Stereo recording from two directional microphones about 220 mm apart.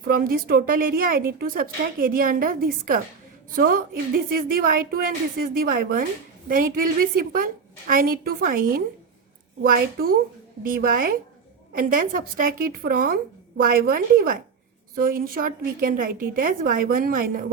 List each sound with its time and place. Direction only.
0.1 s a woman's voice: 40° right (ahead or behind)